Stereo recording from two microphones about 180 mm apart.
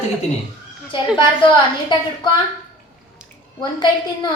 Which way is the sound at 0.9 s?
30° left (ahead or behind).